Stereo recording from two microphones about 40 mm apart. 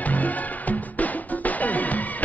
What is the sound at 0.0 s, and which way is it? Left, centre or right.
Music, left.